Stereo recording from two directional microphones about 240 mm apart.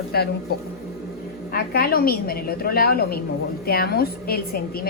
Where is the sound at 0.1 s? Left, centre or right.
Left.